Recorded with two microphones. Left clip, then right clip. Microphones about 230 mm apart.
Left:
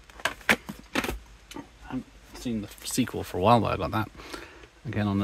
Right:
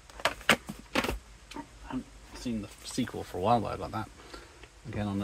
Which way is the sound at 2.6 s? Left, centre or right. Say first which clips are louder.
Left 5 dB; left.